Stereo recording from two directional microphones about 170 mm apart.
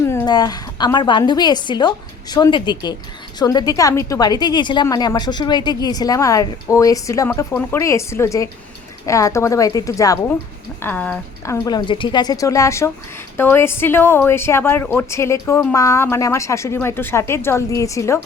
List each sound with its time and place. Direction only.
0.0 s a woman's voice: 15° left (ahead or behind)